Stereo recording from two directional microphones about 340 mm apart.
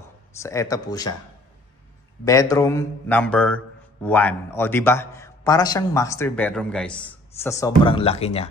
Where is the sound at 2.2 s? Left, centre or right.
Centre.